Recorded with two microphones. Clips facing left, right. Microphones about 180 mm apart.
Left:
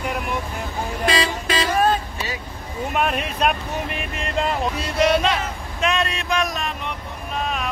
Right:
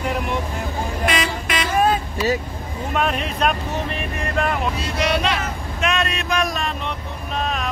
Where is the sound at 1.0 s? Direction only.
30° left (ahead or behind).